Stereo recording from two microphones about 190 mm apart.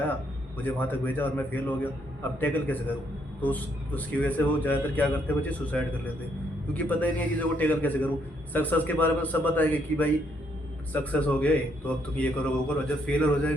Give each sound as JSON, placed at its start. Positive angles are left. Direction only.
{"t": 0.6, "sound": "a man's voice", "side_deg": 10}